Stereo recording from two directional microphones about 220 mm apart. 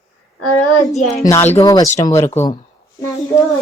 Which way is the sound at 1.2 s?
10° left (ahead or behind).